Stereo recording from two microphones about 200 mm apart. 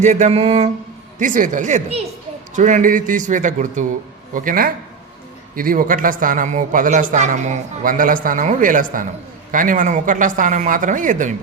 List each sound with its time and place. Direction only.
0.0 s speech: 35° right (ahead or behind)